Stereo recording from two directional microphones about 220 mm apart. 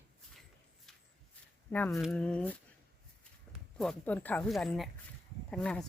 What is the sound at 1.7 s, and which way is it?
Speech, 5° left (ahead or behind).